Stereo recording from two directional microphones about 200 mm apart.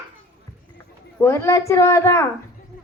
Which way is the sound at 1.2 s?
15° left (ahead or behind).